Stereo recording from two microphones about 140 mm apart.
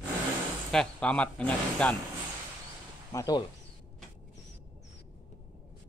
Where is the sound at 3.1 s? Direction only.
25° left (ahead or behind).